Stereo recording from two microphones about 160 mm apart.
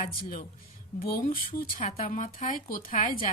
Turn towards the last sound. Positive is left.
turn(degrees=60)  # may be behind; listen again after turning